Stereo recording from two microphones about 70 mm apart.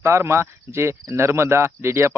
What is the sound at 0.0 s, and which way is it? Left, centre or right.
Speech, right.